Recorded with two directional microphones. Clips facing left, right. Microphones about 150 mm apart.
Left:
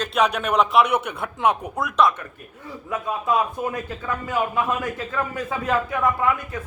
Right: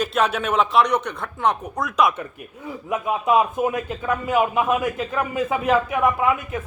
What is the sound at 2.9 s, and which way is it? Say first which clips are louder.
A man's voice: right 4 dB; 20° right (ahead or behind).